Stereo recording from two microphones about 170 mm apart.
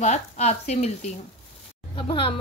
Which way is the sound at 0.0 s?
40° left (ahead or behind).